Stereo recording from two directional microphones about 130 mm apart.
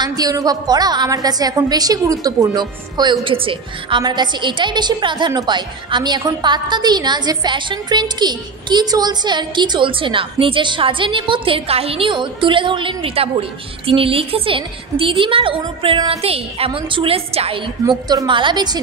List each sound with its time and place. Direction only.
0.0 s a woman's voice: 30° right (ahead or behind); by 17.6 s 50° right (ahead or behind)
17.8 s a woman's voice: 30° right (ahead or behind)